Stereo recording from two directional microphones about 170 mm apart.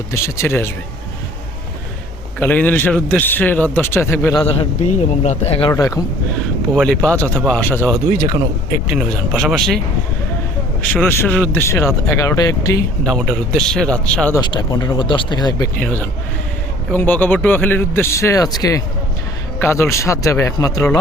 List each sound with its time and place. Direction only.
0.1 s a man's voice: 15° left (ahead or behind)
2.4 s a man's voice: 10° left (ahead or behind)
4.4 s a man's voice: 40° left (ahead or behind)
6.7 s a man's voice: 5° left (ahead or behind)
10.8 s a man's voice: 10° left (ahead or behind)
13.1 s a man's voice: centre (ahead or behind)
14.3 s speech: 25° left (ahead or behind)
15.8 s a man's voice: 10° left (ahead or behind)